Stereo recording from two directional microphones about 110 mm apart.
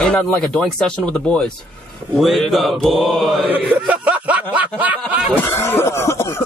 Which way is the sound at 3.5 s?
15° right (ahead or behind).